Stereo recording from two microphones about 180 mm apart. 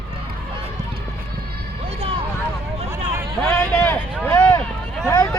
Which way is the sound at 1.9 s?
30° right (ahead or behind).